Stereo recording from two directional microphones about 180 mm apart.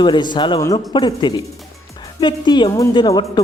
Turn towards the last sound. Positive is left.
turn(degrees=25)  # may be behind; listen again after turning